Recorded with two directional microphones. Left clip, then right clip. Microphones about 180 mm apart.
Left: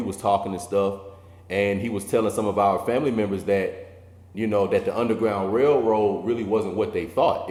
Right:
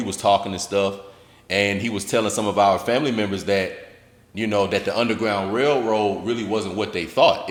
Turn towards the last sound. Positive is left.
turn(degrees=-35)  # may be behind; listen again after turning